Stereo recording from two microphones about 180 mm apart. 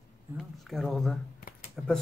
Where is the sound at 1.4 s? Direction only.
55° left (ahead or behind).